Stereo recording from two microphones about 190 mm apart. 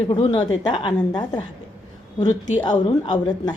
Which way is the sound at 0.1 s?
25° left (ahead or behind).